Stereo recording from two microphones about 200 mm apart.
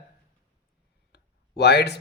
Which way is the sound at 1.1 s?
55° left (ahead or behind).